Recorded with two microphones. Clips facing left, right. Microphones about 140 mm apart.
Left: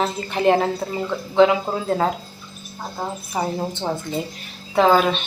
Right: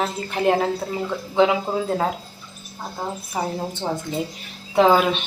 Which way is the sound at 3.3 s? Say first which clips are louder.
Left 3 dB; 5° left (ahead or behind).